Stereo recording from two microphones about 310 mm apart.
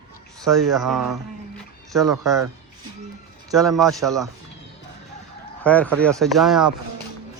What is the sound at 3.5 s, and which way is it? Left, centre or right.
Speech, centre.